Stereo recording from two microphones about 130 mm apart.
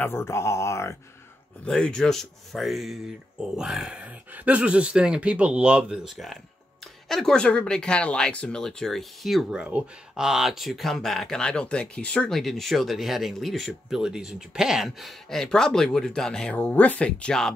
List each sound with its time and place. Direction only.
0.0 s speech: 20° left (ahead or behind)
1.6 s speech: 5° left (ahead or behind)